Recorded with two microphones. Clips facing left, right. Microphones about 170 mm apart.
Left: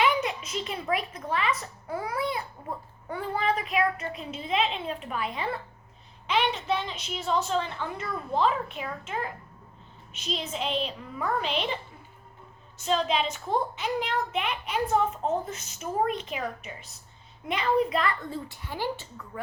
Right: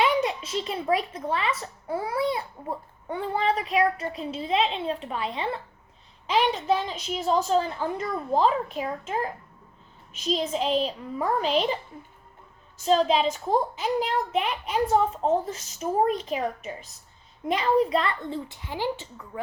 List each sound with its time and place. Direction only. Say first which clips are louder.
0.0 s a child's voice: right 2 dB; 30° right (ahead or behind)
6.2 s a child's voice: right 4 dB; 40° right (ahead or behind)
12.8 s a child's voice: right 5 dB; 40° right (ahead or behind)
17.5 s a child's voice: right 3 dB; 40° right (ahead or behind); by 19.4 s 15° right (ahead or behind)